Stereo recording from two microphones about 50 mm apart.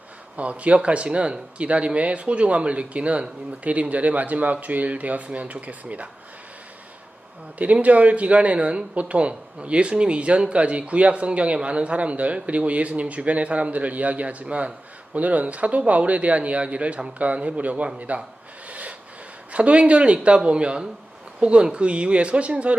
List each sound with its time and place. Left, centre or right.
0.3 s speech: right
7.6 s speech: right
18.7 s rub: right
19.5 s speech: right